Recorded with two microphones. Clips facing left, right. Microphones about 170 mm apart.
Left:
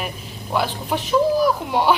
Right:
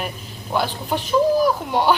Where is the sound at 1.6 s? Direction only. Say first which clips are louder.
Even; 5° left (ahead or behind).